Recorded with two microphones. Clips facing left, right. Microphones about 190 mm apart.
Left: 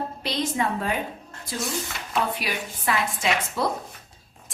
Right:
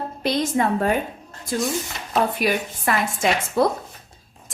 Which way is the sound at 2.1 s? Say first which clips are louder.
Right 6 dB; 50° right (ahead or behind).